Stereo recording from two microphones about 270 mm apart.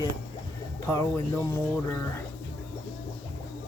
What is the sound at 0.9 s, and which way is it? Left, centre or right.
Speech, centre.